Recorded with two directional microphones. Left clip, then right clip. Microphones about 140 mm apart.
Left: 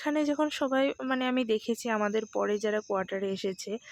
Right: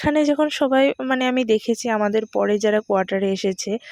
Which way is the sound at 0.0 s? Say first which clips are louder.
Right 10 dB; 55° right (ahead or behind).